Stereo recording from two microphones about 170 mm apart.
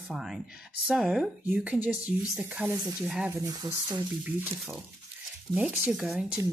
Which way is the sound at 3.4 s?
20° right (ahead or behind).